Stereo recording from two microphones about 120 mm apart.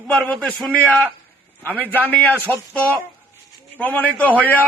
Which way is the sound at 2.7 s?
10° left (ahead or behind).